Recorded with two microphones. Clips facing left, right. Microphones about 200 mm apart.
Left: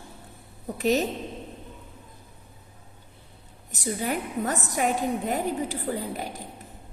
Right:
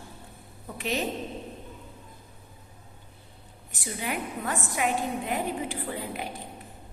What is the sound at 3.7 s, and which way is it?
A woman's voice, 40° left (ahead or behind).